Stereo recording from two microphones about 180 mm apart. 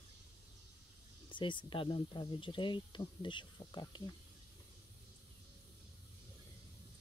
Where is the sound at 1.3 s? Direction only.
25° left (ahead or behind).